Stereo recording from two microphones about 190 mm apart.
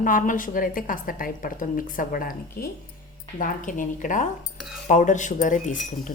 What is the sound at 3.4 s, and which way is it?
Speech, 45° left (ahead or behind).